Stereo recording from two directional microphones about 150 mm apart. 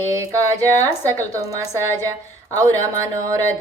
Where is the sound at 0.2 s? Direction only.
20° right (ahead or behind).